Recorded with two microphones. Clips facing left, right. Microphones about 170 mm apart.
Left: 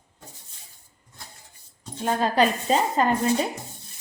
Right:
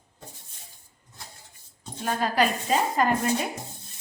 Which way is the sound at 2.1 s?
25° left (ahead or behind).